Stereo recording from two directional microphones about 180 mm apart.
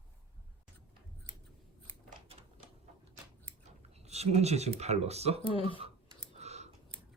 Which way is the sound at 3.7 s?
35° right (ahead or behind).